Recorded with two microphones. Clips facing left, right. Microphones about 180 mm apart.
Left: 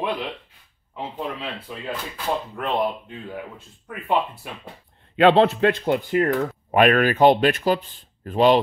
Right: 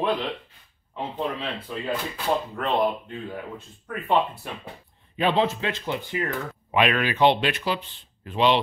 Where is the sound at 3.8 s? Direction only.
5° left (ahead or behind).